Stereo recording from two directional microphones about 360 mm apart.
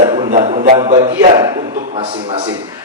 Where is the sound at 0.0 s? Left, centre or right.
Right.